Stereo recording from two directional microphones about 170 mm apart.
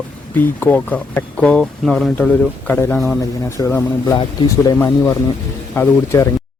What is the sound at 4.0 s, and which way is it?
A man's voice, 20° left (ahead or behind).